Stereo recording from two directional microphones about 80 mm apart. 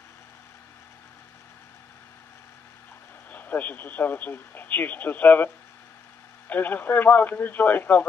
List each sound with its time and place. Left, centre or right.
3.3 s a man's voice: left
6.5 s speech: left